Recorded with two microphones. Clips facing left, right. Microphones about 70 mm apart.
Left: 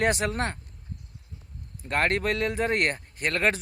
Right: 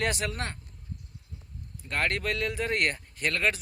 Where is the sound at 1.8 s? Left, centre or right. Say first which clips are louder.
Left 4 dB; left.